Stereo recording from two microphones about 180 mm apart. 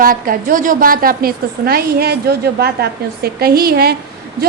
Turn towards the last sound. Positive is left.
turn(degrees=-60)  # may be behind; listen again after turning